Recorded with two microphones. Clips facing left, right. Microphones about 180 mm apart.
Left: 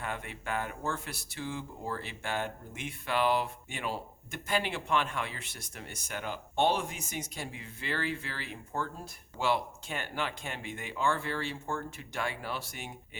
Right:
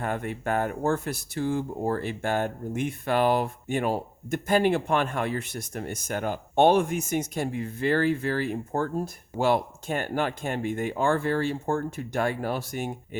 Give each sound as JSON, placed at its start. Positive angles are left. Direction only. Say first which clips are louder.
{"t": 0.0, "sound": "speech", "louder": "right 9 dB", "side_deg": -45}